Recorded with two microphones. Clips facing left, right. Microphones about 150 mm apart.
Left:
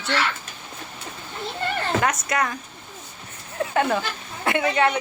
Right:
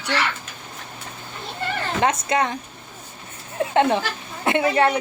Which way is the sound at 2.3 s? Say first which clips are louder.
Right 3 dB; 25° right (ahead or behind).